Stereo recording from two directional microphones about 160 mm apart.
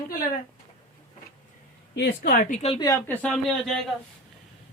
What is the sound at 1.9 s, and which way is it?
Speech, 75° left (ahead or behind).